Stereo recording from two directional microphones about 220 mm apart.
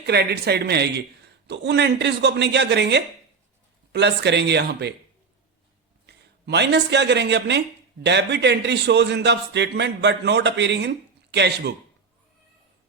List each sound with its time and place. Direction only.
0.0 s a man's voice: 50° right (ahead or behind)
6.1 s a man's voice: 50° right (ahead or behind)